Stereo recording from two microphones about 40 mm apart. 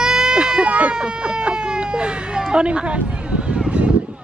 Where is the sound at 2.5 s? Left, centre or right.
Right.